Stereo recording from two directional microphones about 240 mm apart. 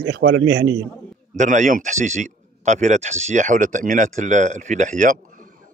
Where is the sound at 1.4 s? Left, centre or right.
Right.